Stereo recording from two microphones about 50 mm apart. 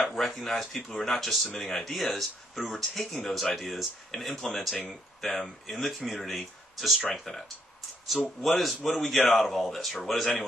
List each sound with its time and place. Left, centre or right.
0.0 s speech: centre
8.4 s speech: centre